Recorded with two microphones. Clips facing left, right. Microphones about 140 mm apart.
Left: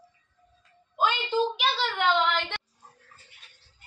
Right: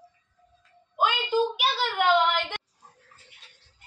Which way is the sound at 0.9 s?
10° right (ahead or behind).